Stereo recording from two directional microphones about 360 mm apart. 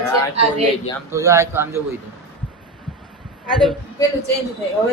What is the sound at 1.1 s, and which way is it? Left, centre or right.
Speech, centre.